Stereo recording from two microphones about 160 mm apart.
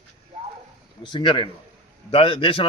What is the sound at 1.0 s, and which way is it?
A man's voice, 30° left (ahead or behind).